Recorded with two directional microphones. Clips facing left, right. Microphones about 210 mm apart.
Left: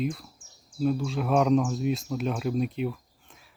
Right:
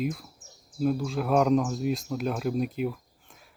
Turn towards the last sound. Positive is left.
turn(degrees=0)  # may be behind; listen again after turning